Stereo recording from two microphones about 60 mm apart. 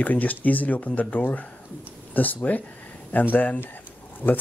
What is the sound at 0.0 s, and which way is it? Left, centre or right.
Speech, left.